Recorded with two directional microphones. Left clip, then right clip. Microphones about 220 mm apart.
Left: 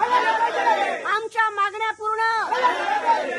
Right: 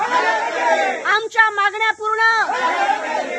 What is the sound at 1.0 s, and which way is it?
A woman's voice, 10° right (ahead or behind).